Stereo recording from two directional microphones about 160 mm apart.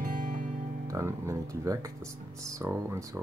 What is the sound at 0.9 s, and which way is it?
Speech, 20° right (ahead or behind).